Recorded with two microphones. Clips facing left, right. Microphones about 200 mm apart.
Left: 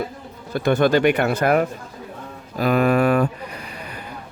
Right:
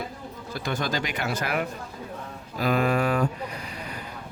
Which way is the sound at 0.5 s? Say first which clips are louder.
Left 12 dB; 60° left (ahead or behind).